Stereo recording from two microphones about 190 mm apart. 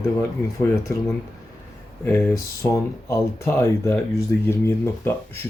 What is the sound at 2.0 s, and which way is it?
Speech, 10° left (ahead or behind).